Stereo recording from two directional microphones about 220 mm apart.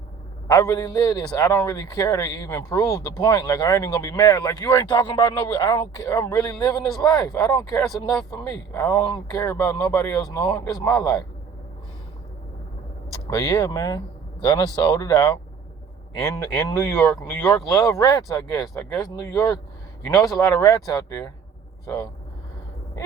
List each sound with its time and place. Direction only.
0.4 s a man's voice: 15° left (ahead or behind)
7.8 s speech: centre (ahead or behind)
8.3 s a man's voice: 15° left (ahead or behind)
13.3 s a man's voice: 15° left (ahead or behind)
20.1 s a man's voice: 15° left (ahead or behind)